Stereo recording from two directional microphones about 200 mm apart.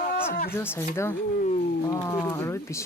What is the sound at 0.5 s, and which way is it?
Speech, 10° left (ahead or behind).